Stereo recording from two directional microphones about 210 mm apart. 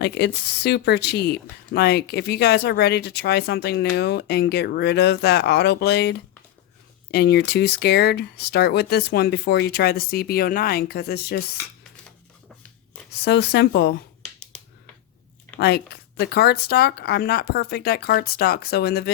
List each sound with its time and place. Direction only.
0.0 s speech: 55° left (ahead or behind)
13.1 s speech: 50° left (ahead or behind)
15.5 s speech: 50° left (ahead or behind)